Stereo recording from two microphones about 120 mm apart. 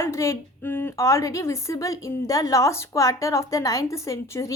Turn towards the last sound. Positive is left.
turn(degrees=25)  # may be behind; listen again after turning